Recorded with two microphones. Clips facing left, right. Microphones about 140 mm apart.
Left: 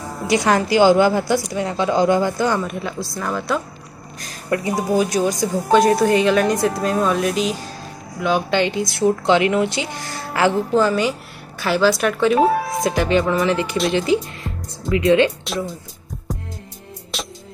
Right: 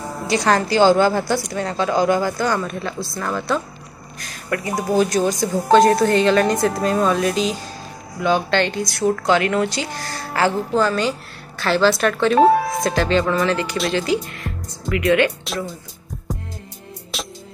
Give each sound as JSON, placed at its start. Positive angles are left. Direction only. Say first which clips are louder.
{"t": 0.3, "sound": "a woman's voice", "louder": "left 1 dB", "side_deg": 15}
{"t": 4.6, "sound": "a woman's voice", "louder": "right 1 dB", "side_deg": 10}
{"t": 15.4, "sound": "speech", "louder": "left 2 dB", "side_deg": 0}
{"t": 17.1, "sound": "music", "louder": "left 1 dB", "side_deg": 0}